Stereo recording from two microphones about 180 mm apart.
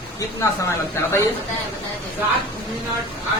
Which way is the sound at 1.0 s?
15° left (ahead or behind).